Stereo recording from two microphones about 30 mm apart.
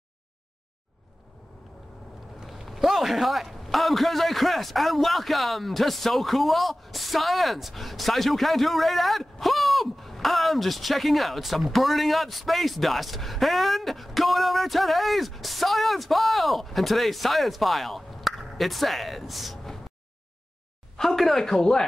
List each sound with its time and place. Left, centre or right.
2.5 s a man's voice: centre
20.9 s speech: centre
21.5 s speech: left